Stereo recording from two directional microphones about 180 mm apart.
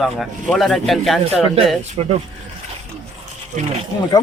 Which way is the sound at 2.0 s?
35° right (ahead or behind).